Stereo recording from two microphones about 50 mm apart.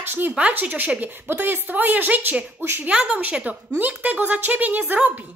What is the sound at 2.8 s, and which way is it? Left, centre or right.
A woman's voice, right.